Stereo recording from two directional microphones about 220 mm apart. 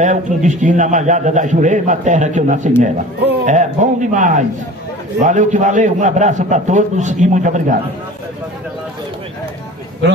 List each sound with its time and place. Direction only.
0.0 s a man's voice: 35° right (ahead or behind)